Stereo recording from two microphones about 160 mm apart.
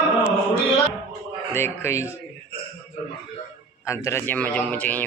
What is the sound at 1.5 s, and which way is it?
Speech, 15° left (ahead or behind).